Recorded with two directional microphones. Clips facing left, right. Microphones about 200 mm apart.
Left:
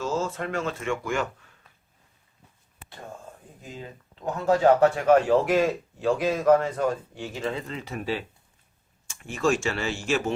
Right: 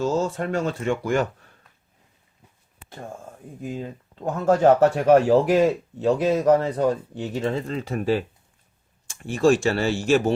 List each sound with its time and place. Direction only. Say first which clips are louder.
0.0 s speech: right 5 dB; 35° right (ahead or behind)
3.6 s speech: right 9 dB; 50° right (ahead or behind)
9.0 s speech: right 6 dB; 35° right (ahead or behind)